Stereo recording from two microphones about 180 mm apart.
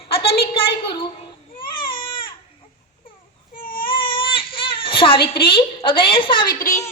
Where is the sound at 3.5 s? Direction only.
50° left (ahead or behind).